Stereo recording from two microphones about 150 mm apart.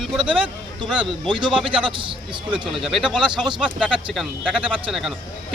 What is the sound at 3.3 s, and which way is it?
Speech, 30° right (ahead or behind).